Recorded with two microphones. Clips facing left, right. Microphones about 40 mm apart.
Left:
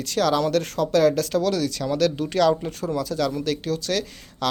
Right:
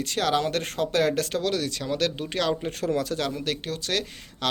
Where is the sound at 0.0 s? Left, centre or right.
Right.